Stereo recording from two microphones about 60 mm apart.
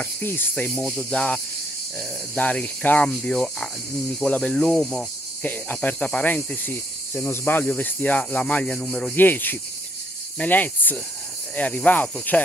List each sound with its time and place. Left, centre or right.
0.2 s speech: left
0.6 s speech: left
0.8 s speech: centre
3.1 s speech: centre
5.4 s speech: left
7.6 s speech: left
9.1 s speech: left